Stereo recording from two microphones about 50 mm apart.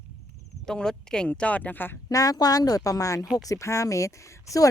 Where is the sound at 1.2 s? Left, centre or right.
Left.